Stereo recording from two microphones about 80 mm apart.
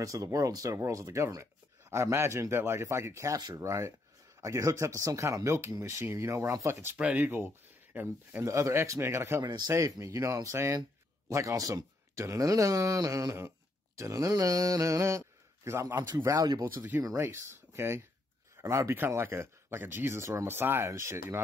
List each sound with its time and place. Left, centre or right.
0.0 s speech: right
3.3 s speech: right
7.0 s speech: centre
8.5 s speech: right
9.4 s speech: right
9.7 s speech: right
16.6 s speech: right
17.2 s speech: right